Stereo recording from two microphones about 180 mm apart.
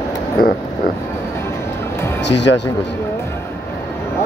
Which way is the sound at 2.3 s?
75° left (ahead or behind).